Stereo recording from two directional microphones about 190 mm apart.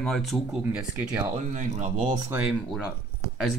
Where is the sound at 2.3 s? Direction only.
5° right (ahead or behind).